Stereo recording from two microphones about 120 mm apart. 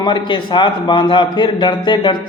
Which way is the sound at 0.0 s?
40° left (ahead or behind).